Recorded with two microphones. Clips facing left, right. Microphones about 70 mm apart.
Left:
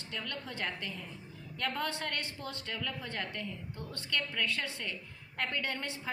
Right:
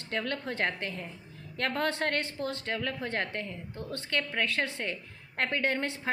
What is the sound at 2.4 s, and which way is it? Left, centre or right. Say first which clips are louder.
Speech: right 7 dB; right.